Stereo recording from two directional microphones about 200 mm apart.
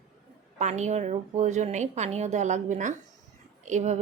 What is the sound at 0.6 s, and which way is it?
A woman's voice, 35° right (ahead or behind).